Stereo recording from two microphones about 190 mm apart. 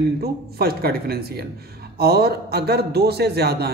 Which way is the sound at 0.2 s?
55° right (ahead or behind).